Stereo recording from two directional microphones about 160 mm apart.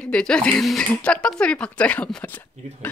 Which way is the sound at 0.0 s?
5° left (ahead or behind).